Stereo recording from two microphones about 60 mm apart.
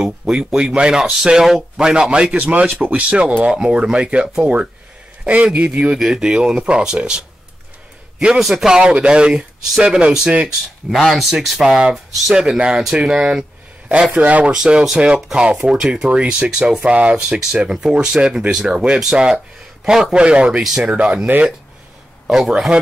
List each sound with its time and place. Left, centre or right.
0.0 s speech: centre
5.9 s speech: centre
8.4 s speech: centre
11.0 s speech: centre
14.1 s speech: right
22.3 s speech: centre